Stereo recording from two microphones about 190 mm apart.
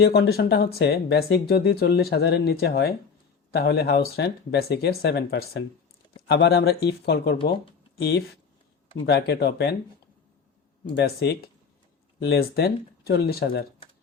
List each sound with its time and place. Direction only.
0.0 s speech: 60° left (ahead or behind)
10.8 s speech: 65° left (ahead or behind)